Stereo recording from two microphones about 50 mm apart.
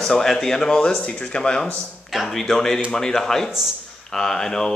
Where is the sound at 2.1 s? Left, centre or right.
Centre.